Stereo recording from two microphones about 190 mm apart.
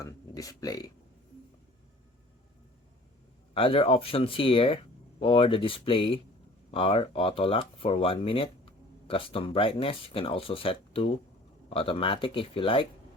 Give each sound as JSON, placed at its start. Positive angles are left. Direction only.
{"t": 0.0, "sound": "speech", "side_deg": 20}
{"t": 3.5, "sound": "speech", "side_deg": 30}